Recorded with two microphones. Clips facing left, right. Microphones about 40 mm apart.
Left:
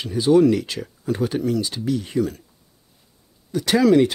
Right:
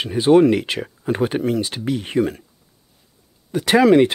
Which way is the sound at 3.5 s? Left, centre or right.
Right.